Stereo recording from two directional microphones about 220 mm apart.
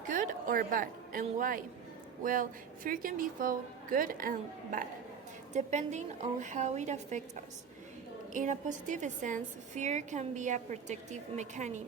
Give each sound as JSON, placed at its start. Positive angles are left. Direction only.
{"t": 0.1, "sound": "a woman's voice", "side_deg": -35}
{"t": 8.3, "sound": "a woman's voice", "side_deg": -35}